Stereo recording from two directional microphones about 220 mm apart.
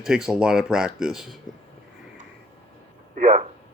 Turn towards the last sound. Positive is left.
turn(degrees=-35)  # may be behind; listen again after turning